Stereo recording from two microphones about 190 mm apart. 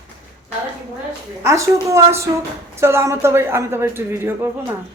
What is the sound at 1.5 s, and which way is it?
Speech, 15° right (ahead or behind).